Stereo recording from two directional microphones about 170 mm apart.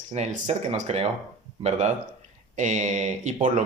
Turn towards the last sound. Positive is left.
turn(degrees=-45)  # may be behind; listen again after turning